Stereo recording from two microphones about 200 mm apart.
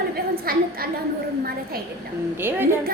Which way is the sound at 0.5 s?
50° right (ahead or behind).